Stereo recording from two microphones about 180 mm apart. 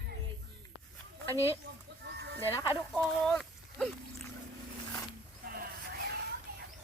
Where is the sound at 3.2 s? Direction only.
5° left (ahead or behind).